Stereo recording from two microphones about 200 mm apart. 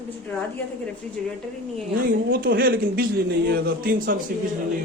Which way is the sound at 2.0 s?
45° right (ahead or behind).